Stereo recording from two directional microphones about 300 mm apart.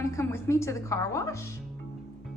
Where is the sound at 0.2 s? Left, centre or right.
Centre.